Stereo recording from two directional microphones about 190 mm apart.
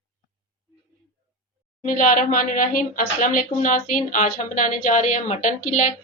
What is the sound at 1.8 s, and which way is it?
Speech, 45° left (ahead or behind).